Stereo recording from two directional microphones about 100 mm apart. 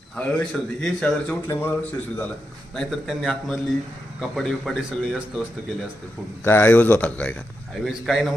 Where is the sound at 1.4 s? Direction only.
20° left (ahead or behind).